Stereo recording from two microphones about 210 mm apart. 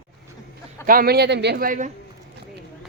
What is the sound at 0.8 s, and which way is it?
Speech, 45° right (ahead or behind).